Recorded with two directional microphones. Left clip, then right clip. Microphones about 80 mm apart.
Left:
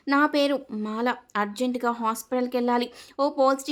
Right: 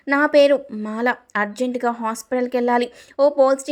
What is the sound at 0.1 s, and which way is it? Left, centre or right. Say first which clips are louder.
Speech: right 8 dB; right.